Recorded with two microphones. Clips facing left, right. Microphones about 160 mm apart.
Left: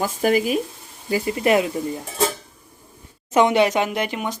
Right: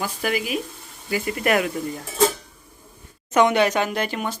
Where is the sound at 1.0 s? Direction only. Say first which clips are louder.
Left 3 dB; 30° left (ahead or behind).